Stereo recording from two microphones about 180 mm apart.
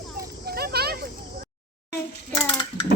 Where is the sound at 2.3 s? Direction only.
25° left (ahead or behind).